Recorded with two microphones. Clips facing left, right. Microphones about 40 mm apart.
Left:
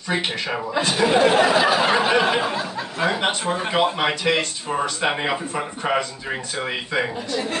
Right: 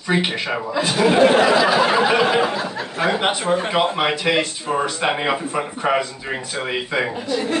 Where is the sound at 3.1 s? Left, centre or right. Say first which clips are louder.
Right 4 dB; centre.